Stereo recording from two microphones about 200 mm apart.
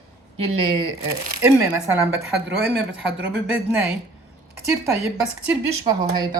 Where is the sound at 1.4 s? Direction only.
15° right (ahead or behind).